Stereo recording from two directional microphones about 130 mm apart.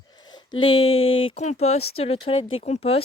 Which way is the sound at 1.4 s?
55° left (ahead or behind).